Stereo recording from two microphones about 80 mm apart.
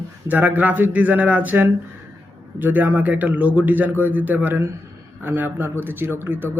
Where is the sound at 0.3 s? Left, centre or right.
Right.